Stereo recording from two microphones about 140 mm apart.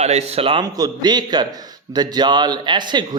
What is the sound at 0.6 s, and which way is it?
Speech, 30° right (ahead or behind).